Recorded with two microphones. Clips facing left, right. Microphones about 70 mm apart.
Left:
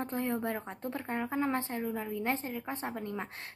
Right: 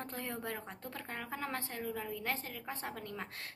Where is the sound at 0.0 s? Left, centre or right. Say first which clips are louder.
Left 8 dB; left.